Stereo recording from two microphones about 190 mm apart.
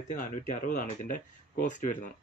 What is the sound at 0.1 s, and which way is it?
Speech, 45° left (ahead or behind).